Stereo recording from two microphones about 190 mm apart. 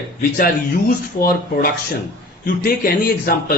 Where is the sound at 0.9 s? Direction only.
50° left (ahead or behind).